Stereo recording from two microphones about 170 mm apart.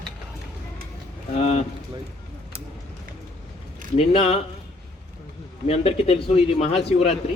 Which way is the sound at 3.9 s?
35° left (ahead or behind).